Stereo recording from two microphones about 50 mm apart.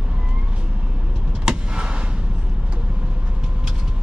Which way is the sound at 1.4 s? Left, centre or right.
Centre.